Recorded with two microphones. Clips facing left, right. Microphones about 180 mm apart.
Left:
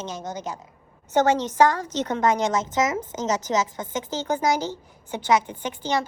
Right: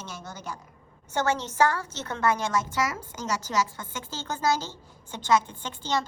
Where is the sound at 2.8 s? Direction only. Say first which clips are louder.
Left 6 dB; 25° left (ahead or behind).